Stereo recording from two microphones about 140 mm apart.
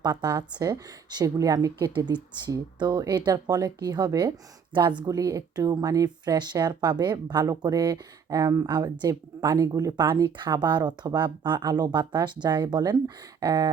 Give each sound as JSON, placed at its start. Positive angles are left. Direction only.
{"t": 0.0, "sound": "speech", "side_deg": -30}